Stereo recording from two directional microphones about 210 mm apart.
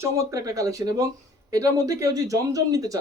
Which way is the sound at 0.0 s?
15° right (ahead or behind).